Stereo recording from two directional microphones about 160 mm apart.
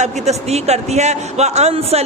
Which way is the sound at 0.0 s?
45° right (ahead or behind).